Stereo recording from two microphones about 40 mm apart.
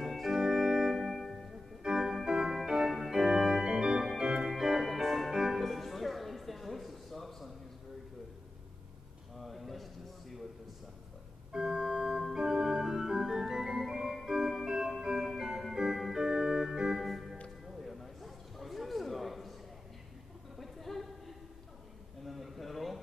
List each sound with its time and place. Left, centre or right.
0.0 s organ: centre
1.1 s music: centre
1.8 s organ: centre
4.5 s music: centre
9.4 s a sound: centre
11.5 s organ: centre
17.0 s music: centre
17.7 s a sound: centre
20.5 s a sound: centre